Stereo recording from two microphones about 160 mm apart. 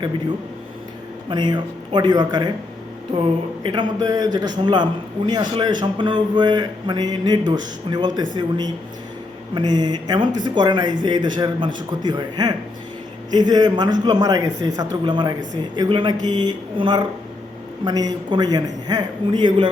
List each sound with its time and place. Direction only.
1.3 s a man's voice: 30° right (ahead or behind)